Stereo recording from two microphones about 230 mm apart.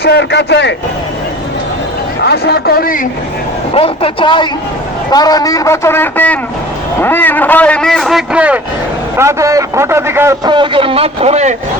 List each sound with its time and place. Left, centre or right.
0.0 s a man's voice: left
2.2 s a man's voice: left
3.8 s a man's voice: left; by 11.5 s right